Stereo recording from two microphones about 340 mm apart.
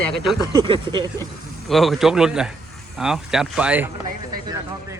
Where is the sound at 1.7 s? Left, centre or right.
Centre.